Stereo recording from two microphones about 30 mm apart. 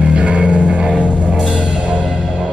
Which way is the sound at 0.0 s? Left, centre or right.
Right.